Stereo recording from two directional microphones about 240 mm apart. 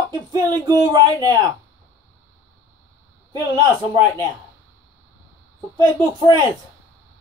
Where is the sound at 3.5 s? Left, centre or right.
Centre.